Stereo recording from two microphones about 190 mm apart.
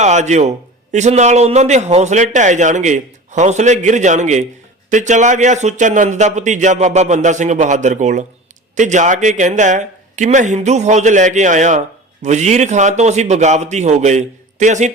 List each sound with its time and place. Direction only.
0.0 s a man's voice: 40° right (ahead or behind)